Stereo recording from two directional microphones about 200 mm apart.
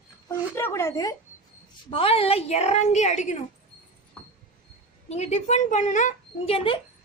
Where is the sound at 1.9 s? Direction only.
30° left (ahead or behind).